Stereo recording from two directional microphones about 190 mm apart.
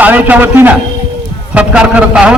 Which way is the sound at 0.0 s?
10° right (ahead or behind).